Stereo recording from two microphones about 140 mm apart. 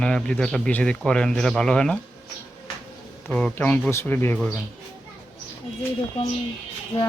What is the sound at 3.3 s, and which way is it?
Speech, 5° left (ahead or behind).